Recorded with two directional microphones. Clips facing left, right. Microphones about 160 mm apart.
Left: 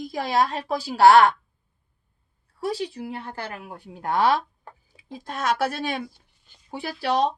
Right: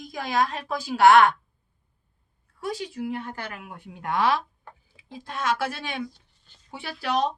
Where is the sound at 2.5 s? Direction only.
30° left (ahead or behind).